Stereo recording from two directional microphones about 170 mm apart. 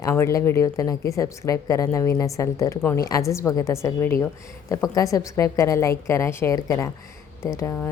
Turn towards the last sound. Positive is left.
turn(degrees=15)  # may be behind; listen again after turning